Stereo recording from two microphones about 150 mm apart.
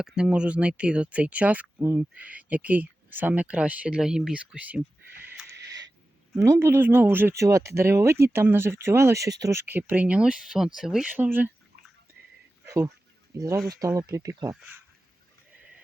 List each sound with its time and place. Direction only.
0.0 s speech: 5° right (ahead or behind)
5.4 s a sound: 5° right (ahead or behind)
6.3 s speech: 20° right (ahead or behind)
12.6 s speech: 20° right (ahead or behind)